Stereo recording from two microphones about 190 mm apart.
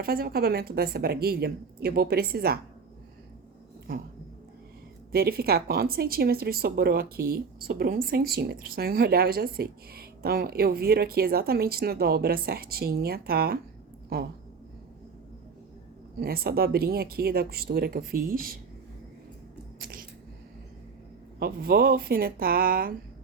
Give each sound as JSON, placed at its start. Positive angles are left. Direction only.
{"t": 0.0, "sound": "a woman's voice", "side_deg": -50}
{"t": 5.1, "sound": "speech", "side_deg": -55}
{"t": 16.2, "sound": "speech", "side_deg": -55}
{"t": 19.8, "sound": "a sound", "side_deg": -50}
{"t": 21.3, "sound": "speech", "side_deg": -55}